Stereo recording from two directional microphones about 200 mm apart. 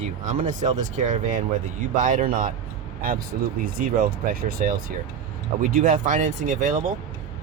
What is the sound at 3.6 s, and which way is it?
Speech, 45° right (ahead or behind).